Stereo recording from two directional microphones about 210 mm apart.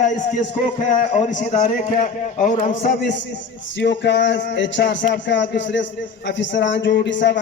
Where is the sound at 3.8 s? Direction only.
60° left (ahead or behind).